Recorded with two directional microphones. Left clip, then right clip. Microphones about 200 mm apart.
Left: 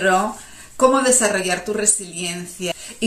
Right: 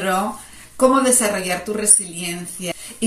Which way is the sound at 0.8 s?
5° left (ahead or behind).